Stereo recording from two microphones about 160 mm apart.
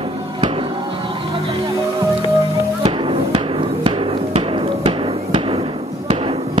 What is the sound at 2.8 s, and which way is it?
Hammer, 35° right (ahead or behind).